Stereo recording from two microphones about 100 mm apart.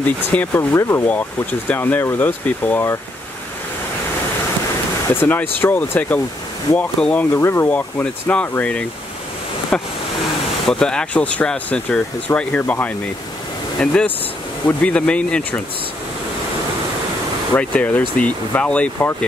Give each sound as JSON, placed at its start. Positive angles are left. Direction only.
{"t": 0.0, "sound": "speech", "side_deg": 15}
{"t": 0.6, "sound": "speech", "side_deg": 30}
{"t": 1.0, "sound": "speech", "side_deg": 15}
{"t": 5.1, "sound": "speech", "side_deg": 20}
{"t": 7.3, "sound": "speech", "side_deg": 25}
{"t": 7.7, "sound": "speech", "side_deg": 15}
{"t": 17.6, "sound": "speech", "side_deg": 15}